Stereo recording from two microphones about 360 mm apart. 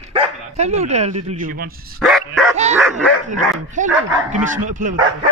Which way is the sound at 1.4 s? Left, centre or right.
Right.